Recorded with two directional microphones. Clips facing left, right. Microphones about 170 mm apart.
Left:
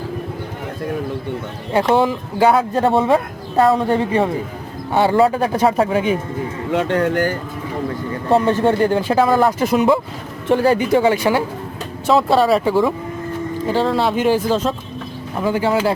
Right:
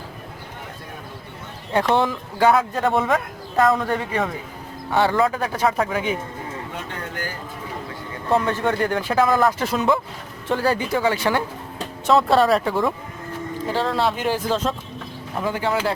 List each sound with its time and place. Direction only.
1.7 s speech: 10° left (ahead or behind)
2.5 s speech: 30° left (ahead or behind)
4.9 s speech: 15° left (ahead or behind)
5.1 s speech: 30° left (ahead or behind)
6.7 s speech: 85° left; by 7.3 s 60° left (ahead or behind)
8.3 s speech: 25° left (ahead or behind)
9.4 s speech: 15° left (ahead or behind)
12.0 s speech: centre (ahead or behind)